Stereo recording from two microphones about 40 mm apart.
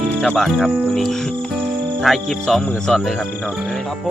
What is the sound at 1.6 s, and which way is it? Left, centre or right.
Music, centre.